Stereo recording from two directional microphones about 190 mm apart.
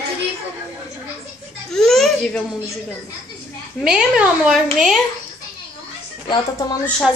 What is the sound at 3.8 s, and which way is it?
A woman's voice, 5° right (ahead or behind).